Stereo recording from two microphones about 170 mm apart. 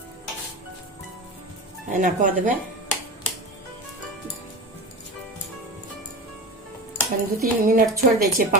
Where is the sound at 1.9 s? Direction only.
45° right (ahead or behind).